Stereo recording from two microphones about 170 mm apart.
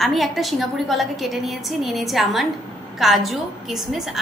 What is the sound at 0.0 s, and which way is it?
A woman's voice, centre (ahead or behind).